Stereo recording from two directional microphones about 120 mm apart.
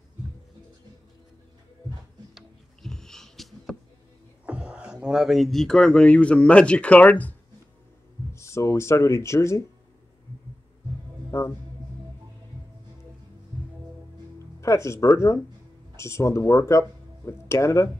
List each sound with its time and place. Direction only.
2.3 s a sound: 5° left (ahead or behind)
4.5 s speech: 10° right (ahead or behind); by 7.3 s 15° left (ahead or behind)
8.3 s speech: 25° left (ahead or behind)
11.2 s music: 25° left (ahead or behind)
14.6 s speech: 25° left (ahead or behind)